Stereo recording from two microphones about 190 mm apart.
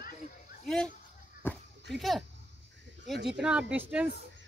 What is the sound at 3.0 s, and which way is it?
Speech, 65° right (ahead or behind).